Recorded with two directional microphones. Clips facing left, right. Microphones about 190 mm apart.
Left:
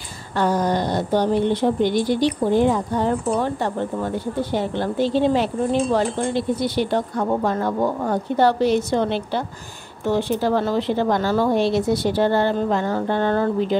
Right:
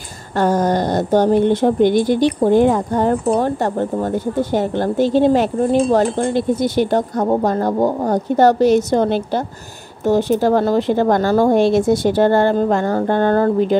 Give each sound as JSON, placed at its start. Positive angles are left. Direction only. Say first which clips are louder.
{"t": 0.4, "sound": "speech", "louder": "right 4 dB", "side_deg": -45}